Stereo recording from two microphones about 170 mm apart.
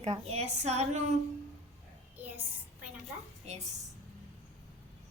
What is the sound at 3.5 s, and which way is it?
Speech, 40° right (ahead or behind).